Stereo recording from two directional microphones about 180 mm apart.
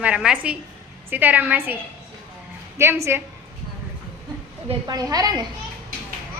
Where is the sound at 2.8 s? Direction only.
15° right (ahead or behind).